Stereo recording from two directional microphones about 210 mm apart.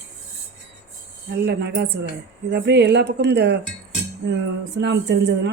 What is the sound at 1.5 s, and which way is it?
Speech, 55° right (ahead or behind).